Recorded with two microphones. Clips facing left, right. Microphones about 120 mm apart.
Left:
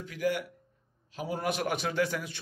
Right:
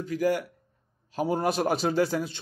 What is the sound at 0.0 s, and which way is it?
A man's voice, 40° right (ahead or behind).